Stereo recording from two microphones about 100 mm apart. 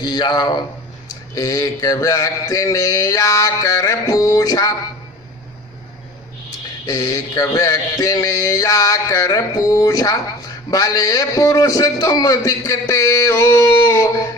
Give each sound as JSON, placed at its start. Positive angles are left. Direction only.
{"t": 0.0, "sound": "a man's voice", "side_deg": 45}
{"t": 6.8, "sound": "a man's voice", "side_deg": 35}